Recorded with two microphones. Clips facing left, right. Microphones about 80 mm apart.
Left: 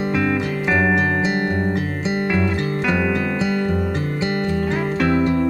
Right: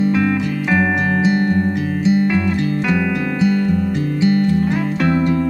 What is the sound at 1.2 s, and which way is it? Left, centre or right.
Music, left.